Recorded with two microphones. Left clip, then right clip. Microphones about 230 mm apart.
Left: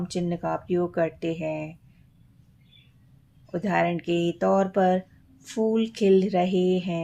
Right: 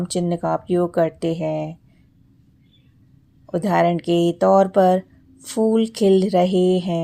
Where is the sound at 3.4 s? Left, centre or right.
Right.